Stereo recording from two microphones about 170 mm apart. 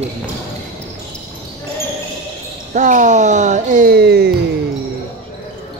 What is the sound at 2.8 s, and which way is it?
Speech, 45° right (ahead or behind).